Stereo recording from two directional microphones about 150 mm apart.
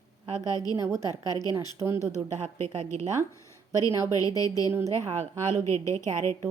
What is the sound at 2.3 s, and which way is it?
Speech, 50° right (ahead or behind).